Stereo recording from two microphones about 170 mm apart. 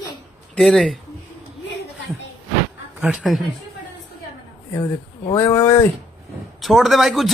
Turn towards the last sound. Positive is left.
turn(degrees=0)  # may be behind; listen again after turning